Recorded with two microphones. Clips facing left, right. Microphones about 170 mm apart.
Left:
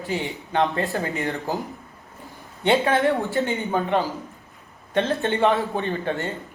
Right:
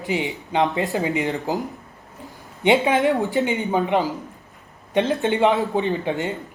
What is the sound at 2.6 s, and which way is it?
Speech, 15° right (ahead or behind).